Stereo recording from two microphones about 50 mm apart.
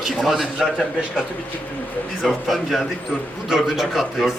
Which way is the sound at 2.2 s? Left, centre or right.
Centre.